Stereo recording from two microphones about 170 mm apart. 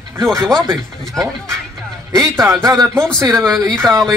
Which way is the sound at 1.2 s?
5° left (ahead or behind).